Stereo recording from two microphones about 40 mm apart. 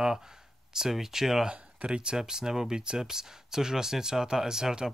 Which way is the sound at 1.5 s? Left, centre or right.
Right.